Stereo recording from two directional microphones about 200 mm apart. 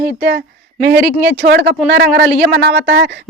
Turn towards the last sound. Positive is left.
turn(degrees=-55)  # may be behind; listen again after turning